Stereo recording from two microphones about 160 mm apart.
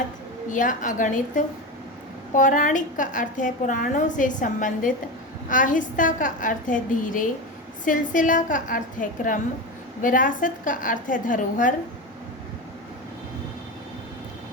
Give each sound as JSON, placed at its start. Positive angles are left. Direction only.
{"t": 0.5, "sound": "a woman's voice", "side_deg": 55}